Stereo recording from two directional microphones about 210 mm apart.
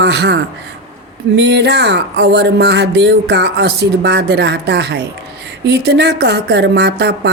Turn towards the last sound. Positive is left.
turn(degrees=-50)  # may be behind; listen again after turning